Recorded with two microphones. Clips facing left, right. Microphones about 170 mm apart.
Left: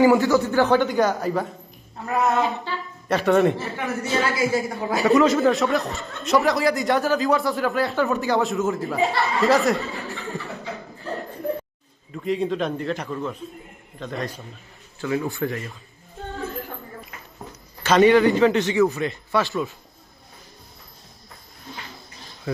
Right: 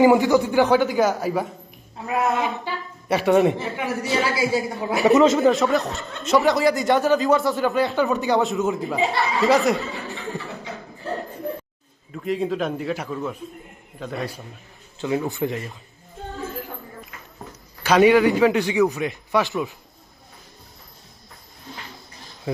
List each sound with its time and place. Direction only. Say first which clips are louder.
0.0 s a man's voice: right 1 dB; 20° right (ahead or behind)
5.5 s speech: right 2 dB; centre (ahead or behind)
12.1 s a man's voice: even; centre (ahead or behind)
15.0 s speech: right 1 dB; 20° right (ahead or behind)
17.8 s a man's voice: even; 10° right (ahead or behind)